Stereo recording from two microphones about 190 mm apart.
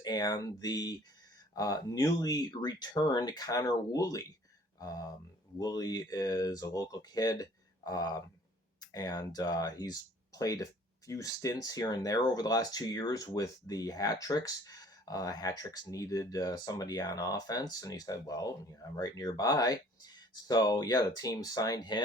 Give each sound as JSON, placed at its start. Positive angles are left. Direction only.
{"t": 0.0, "sound": "speech", "side_deg": 20}